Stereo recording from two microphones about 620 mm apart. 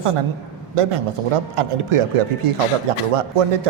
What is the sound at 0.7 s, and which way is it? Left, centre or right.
A man's voice, right.